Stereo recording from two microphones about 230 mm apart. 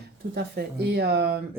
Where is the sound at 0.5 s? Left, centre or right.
Right.